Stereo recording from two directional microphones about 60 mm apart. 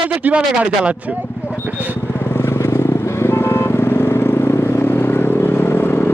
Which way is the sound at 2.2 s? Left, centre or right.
Left.